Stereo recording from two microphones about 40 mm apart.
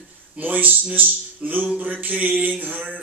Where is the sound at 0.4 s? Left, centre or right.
Right.